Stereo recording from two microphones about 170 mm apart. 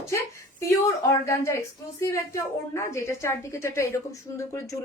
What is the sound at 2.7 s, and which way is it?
A woman's voice, 15° left (ahead or behind).